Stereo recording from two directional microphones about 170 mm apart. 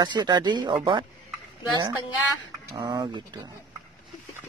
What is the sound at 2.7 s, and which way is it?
Speech, 25° right (ahead or behind).